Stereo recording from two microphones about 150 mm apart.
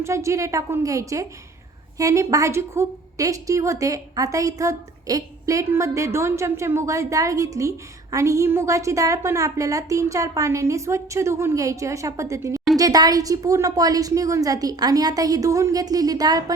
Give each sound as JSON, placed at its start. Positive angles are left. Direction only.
{"t": 0.0, "sound": "a woman's voice", "side_deg": -20}